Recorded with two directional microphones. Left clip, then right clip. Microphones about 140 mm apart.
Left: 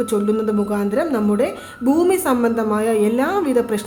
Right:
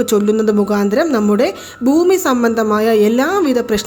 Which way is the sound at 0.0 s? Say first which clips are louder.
Right 5 dB; 45° right (ahead or behind).